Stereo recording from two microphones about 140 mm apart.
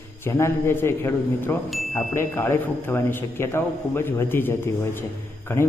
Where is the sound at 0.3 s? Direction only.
20° left (ahead or behind).